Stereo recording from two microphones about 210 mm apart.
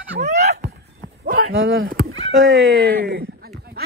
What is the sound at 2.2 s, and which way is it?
Speech, 65° right (ahead or behind).